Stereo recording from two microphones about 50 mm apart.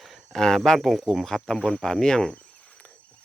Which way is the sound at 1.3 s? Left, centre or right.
Centre.